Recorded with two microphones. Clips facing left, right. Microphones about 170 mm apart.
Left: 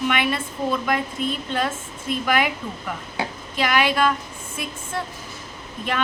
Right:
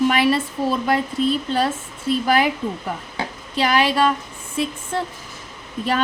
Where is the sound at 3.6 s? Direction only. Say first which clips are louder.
Right 2 dB; 35° right (ahead or behind).